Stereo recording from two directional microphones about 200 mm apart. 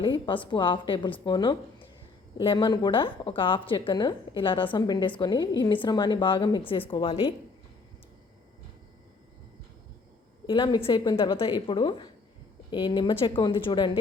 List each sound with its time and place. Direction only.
0.0 s a woman's voice: 25° left (ahead or behind)
10.4 s a woman's voice: 20° left (ahead or behind)